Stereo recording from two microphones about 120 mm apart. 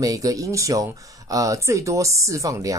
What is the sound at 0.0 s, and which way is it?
Speech, 30° right (ahead or behind).